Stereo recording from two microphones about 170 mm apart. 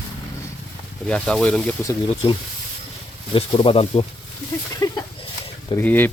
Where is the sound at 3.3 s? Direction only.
30° left (ahead or behind).